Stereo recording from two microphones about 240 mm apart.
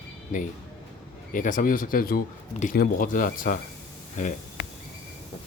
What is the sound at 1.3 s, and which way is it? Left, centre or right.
A man's voice, left.